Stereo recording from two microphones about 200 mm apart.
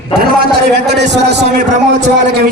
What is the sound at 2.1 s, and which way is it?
Speech, 60° right (ahead or behind).